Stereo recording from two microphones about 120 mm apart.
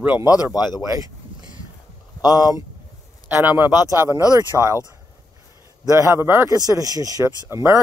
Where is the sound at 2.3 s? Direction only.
35° left (ahead or behind).